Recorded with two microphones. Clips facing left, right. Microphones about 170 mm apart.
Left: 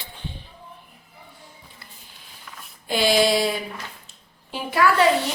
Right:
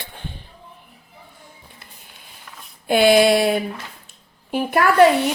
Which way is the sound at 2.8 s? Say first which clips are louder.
Right 6 dB; 55° right (ahead or behind).